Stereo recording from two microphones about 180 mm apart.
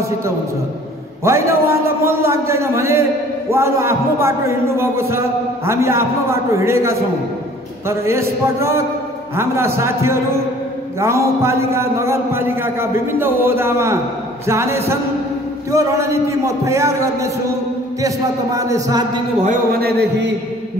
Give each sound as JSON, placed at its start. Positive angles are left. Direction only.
{"t": 1.2, "sound": "a man's voice", "side_deg": -15}
{"t": 19.4, "sound": "a man's voice", "side_deg": -50}